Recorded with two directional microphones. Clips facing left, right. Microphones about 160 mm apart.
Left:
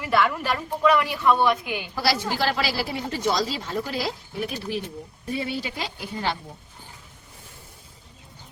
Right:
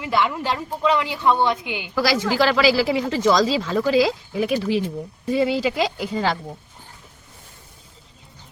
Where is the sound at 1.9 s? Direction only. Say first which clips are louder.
Right 6 dB; 90° right.